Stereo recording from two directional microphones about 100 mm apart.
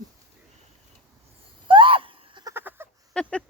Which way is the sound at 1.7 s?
60° right (ahead or behind).